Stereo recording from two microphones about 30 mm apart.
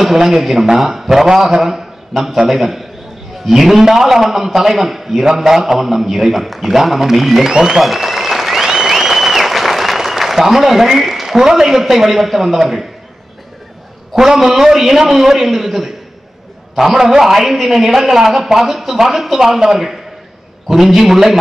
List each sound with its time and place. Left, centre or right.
0.0 s a man's voice: centre
7.8 s applause: centre
11.4 s a man's voice: centre
14.1 s a man's voice: centre